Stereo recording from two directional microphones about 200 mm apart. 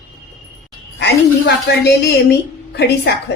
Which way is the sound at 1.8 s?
55° left (ahead or behind).